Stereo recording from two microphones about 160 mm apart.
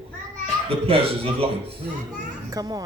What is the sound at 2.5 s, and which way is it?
Music, 25° right (ahead or behind).